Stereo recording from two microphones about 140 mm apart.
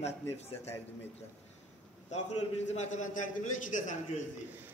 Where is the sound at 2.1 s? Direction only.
55° left (ahead or behind).